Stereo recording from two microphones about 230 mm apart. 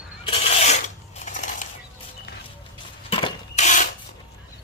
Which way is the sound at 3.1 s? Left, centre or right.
Left.